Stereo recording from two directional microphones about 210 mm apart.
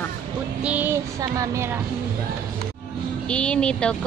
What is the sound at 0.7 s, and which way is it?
Child singing, 10° right (ahead or behind).